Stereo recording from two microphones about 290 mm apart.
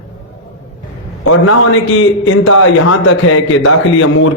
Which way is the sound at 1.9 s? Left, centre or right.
Left.